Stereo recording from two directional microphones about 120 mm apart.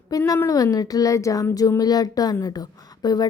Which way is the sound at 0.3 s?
25° left (ahead or behind).